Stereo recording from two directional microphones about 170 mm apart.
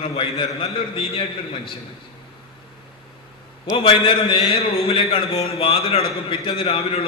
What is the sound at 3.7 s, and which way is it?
A man's voice, 30° left (ahead or behind).